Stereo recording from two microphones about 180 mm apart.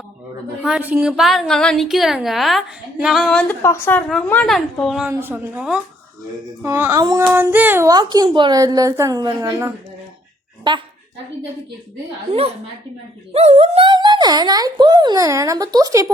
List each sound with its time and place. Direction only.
0.6 s a woman's voice: 5° right (ahead or behind)
5.0 s speech: 10° right (ahead or behind)
7.3 s speech: 10° right (ahead or behind)
12.3 s a woman's voice: 35° right (ahead or behind); by 16.1 s 20° right (ahead or behind)